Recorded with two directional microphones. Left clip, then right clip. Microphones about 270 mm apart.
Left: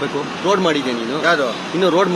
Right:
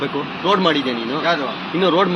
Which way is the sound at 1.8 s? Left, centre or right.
Left.